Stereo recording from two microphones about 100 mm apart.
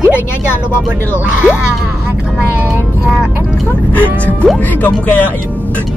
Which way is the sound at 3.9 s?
15° left (ahead or behind).